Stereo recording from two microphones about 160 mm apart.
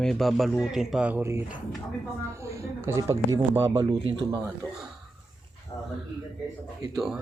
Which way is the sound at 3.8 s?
30° right (ahead or behind).